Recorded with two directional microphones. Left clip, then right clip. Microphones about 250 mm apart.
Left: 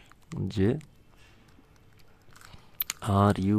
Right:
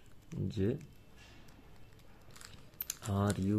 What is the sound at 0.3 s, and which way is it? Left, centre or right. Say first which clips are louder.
Speech: left 8 dB; left.